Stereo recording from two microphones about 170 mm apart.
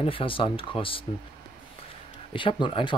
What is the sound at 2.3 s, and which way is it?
Speech, 30° left (ahead or behind).